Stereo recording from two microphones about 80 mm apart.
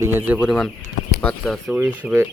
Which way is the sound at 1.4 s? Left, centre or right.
Centre.